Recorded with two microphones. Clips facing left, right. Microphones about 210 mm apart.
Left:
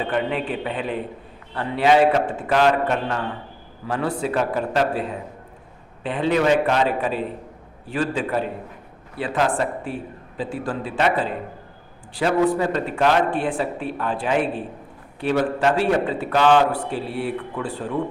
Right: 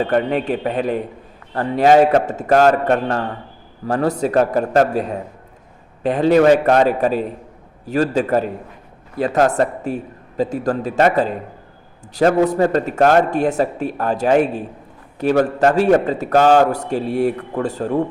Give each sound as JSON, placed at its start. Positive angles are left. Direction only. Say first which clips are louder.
{"t": 0.0, "sound": "a man's voice", "louder": "right 6 dB", "side_deg": -45}